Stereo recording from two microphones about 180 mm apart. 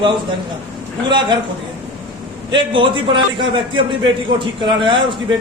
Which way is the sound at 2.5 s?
25° right (ahead or behind).